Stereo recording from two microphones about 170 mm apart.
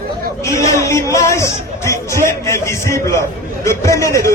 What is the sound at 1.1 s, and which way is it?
Chatter, 20° left (ahead or behind).